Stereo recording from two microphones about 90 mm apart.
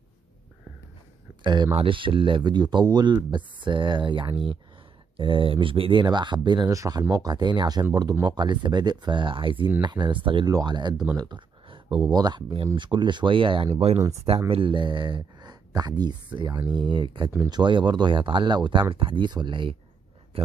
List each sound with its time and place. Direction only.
1.4 s speech: 60° right (ahead or behind)
6.7 s speech: 45° right (ahead or behind); by 9.7 s 70° right (ahead or behind)
9.8 s speech: 60° right (ahead or behind)
10.4 s speech: 50° right (ahead or behind); by 19.8 s 70° right (ahead or behind)